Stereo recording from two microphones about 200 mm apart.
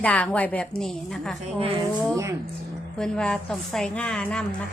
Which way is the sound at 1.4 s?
30° right (ahead or behind).